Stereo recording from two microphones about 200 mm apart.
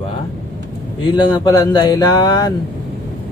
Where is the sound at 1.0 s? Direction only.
20° left (ahead or behind).